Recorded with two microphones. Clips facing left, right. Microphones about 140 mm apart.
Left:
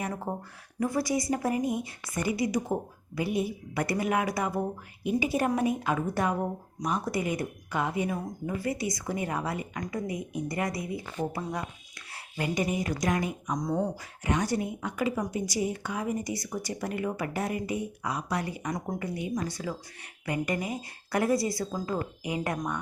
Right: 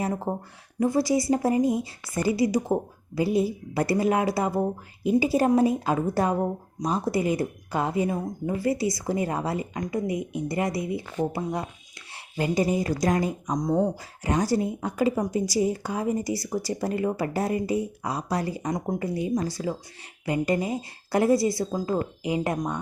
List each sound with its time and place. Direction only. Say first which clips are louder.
0.0 s speech: right 5 dB; 25° right (ahead or behind)
13.5 s speech: right 5 dB; 20° right (ahead or behind)